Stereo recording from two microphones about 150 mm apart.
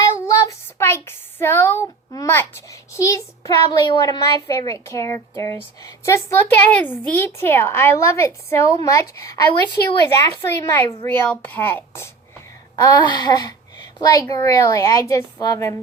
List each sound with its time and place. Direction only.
0.3 s a sound: 20° left (ahead or behind)
2.9 s a child's voice: 20° left (ahead or behind)
12.7 s a child's voice: 30° left (ahead or behind)